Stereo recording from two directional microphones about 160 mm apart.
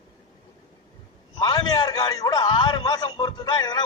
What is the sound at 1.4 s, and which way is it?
A man's voice, 30° left (ahead or behind).